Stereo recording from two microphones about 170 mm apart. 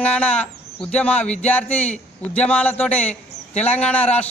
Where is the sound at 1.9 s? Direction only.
40° left (ahead or behind).